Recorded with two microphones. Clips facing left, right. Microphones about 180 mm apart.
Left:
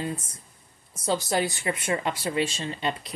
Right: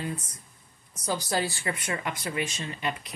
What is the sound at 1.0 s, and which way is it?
Speech, 20° left (ahead or behind).